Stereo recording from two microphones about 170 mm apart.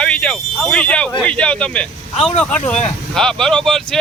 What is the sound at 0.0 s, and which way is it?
Speech, 5° left (ahead or behind).